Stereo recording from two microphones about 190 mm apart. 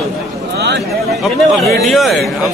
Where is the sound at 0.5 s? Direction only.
60° right (ahead or behind).